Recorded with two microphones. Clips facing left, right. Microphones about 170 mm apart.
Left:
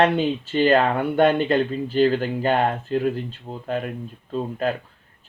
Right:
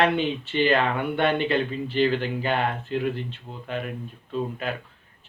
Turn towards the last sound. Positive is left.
turn(degrees=40)  # may be behind; listen again after turning